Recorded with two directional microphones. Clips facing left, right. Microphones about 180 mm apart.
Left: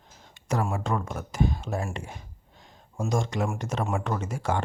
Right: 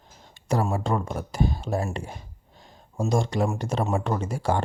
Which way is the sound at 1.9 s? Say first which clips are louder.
Right 3 dB; 35° right (ahead or behind).